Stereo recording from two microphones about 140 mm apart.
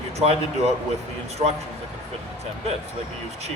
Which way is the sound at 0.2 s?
50° right (ahead or behind).